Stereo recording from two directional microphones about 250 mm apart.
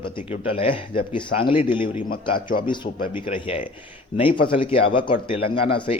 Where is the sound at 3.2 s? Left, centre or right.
Left.